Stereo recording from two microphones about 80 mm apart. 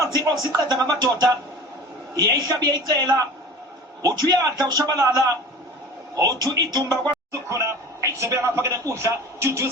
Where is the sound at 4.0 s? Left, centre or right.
Right.